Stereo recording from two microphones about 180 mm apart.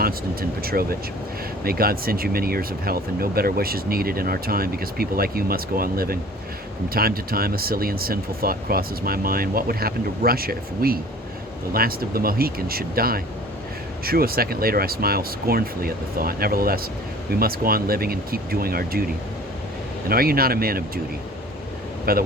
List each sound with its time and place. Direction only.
0.6 s speech: 55° right (ahead or behind)
20.1 s speech: 55° right (ahead or behind)
22.1 s speech: 55° right (ahead or behind)